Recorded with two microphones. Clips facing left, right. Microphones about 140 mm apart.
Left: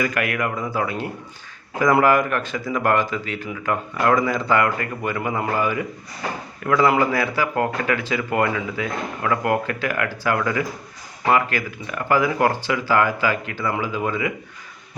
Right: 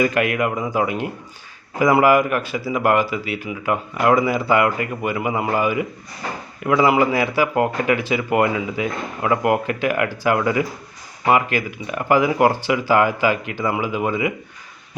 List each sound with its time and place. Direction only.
0.0 s speech: 20° right (ahead or behind)